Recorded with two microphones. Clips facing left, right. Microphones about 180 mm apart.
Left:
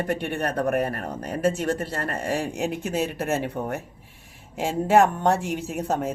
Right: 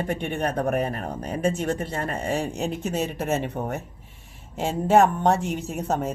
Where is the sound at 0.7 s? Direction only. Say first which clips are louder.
Left 1 dB; 55° left (ahead or behind).